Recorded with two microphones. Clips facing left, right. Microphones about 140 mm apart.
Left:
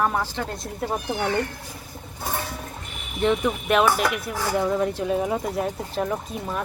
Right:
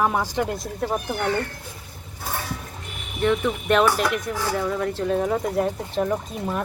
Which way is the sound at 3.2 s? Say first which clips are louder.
Even; 20° left (ahead or behind).